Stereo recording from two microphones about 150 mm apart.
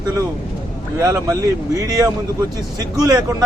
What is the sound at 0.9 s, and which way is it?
Speech, 20° right (ahead or behind).